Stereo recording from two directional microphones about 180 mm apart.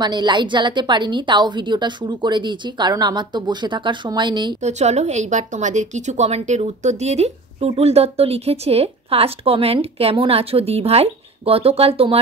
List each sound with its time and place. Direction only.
0.0 s a woman's voice: 25° right (ahead or behind)
4.6 s a woman's voice: 40° right (ahead or behind)